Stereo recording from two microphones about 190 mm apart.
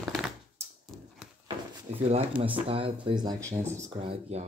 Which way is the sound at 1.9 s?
35° right (ahead or behind).